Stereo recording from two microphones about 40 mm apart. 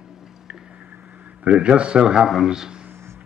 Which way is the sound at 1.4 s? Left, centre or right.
Right.